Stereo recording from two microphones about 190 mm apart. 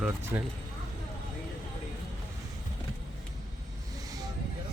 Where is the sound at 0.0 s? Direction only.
10° right (ahead or behind).